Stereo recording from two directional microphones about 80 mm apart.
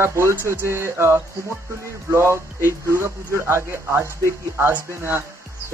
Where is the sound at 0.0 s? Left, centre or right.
Right.